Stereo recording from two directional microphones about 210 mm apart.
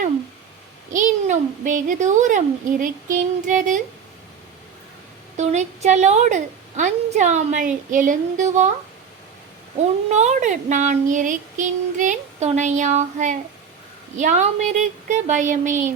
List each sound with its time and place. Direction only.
0.9 s a woman's voice: 35° right (ahead or behind)
5.4 s a woman's voice: 35° right (ahead or behind)
10.1 s a woman's voice: 35° right (ahead or behind)